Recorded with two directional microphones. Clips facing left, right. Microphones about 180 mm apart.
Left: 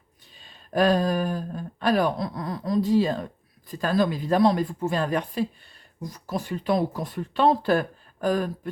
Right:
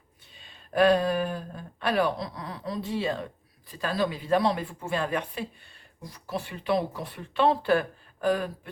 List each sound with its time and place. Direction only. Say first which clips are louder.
0.3 s speech: even; 40° left (ahead or behind)